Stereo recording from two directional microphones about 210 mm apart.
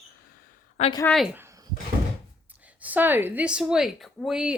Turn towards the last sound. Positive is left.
turn(degrees=-5)  # may be behind; listen again after turning